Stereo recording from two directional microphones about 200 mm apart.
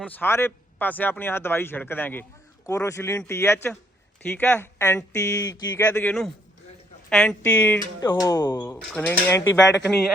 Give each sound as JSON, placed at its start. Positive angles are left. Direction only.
{"t": 0.0, "sound": "speech", "side_deg": 10}
{"t": 5.8, "sound": "speech", "side_deg": 5}